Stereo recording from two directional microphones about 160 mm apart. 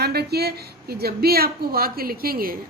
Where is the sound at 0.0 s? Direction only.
85° right.